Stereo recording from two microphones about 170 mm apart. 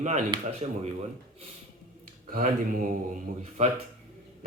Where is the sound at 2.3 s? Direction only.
55° right (ahead or behind).